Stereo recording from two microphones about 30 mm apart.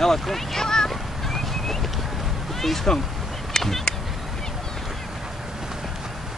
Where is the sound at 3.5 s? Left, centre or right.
Centre.